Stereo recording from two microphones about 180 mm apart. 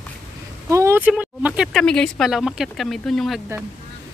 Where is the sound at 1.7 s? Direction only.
5° left (ahead or behind).